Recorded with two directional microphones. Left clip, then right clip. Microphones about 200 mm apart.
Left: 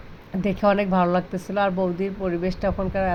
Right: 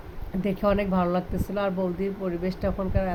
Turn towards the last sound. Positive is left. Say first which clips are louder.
# left 4 dB
turn(degrees=5)  # may be behind; listen again after turning